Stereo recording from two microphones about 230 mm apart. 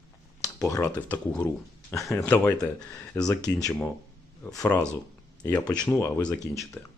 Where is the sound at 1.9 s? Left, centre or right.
Centre.